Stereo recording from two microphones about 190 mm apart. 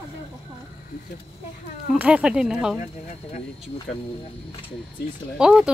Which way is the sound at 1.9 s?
5° right (ahead or behind).